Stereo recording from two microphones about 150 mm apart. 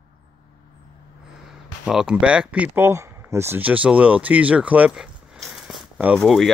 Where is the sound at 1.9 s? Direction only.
5° right (ahead or behind).